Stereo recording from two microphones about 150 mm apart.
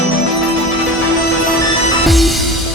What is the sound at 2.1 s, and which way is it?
Music, centre (ahead or behind).